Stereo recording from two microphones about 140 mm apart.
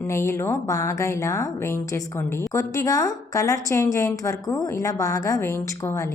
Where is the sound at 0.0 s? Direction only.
20° left (ahead or behind).